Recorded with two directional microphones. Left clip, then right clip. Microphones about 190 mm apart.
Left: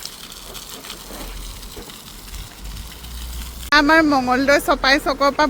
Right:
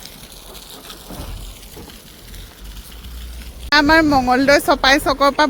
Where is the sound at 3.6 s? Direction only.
15° right (ahead or behind).